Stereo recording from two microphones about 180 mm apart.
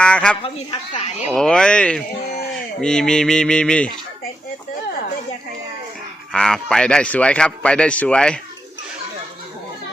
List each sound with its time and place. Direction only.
0.0 s a sound: 5° left (ahead or behind)
0.4 s speech: 35° left (ahead or behind)
1.3 s a man's voice: 5° left (ahead or behind)
6.3 s a man's voice: 5° left (ahead or behind)